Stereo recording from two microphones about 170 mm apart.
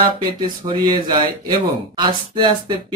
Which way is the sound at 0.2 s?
25° right (ahead or behind).